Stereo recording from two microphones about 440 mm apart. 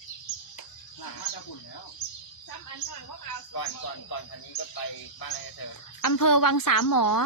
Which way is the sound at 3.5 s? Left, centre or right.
Left.